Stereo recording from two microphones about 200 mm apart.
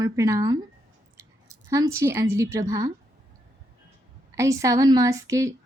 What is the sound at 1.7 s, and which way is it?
A woman's voice, 15° right (ahead or behind).